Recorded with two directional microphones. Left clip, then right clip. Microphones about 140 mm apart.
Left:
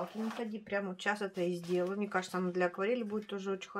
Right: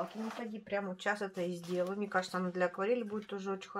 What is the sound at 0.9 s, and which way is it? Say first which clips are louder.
Speech: left 1 dB; 15° left (ahead or behind).